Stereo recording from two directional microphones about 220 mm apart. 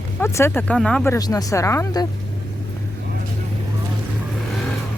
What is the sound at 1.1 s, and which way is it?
Speech, 15° left (ahead or behind).